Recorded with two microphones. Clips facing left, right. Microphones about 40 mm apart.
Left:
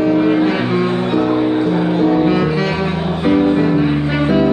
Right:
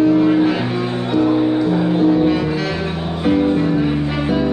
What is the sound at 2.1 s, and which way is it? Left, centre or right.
Music, left.